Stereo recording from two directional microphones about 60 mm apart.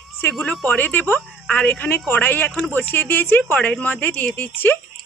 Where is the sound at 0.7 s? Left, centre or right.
Left.